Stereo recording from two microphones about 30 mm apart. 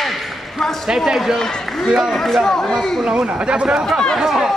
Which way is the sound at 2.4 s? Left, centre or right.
Centre.